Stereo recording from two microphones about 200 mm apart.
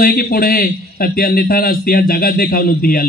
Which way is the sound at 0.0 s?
50° left (ahead or behind).